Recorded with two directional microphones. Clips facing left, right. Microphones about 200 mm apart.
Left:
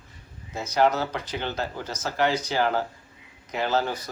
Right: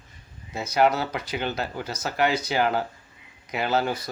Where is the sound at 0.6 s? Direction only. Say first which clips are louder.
Right 1 dB; 10° right (ahead or behind).